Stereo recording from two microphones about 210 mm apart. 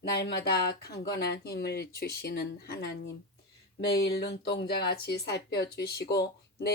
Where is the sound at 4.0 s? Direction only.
50° left (ahead or behind).